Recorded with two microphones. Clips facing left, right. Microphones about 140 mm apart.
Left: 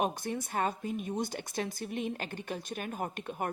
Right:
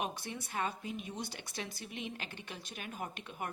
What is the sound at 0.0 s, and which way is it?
Speech, 45° left (ahead or behind).